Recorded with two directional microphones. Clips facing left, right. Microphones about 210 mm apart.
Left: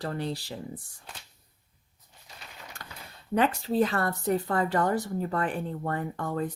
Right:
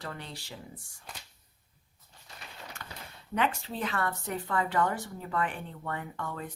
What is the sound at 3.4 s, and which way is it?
Speech, 35° left (ahead or behind).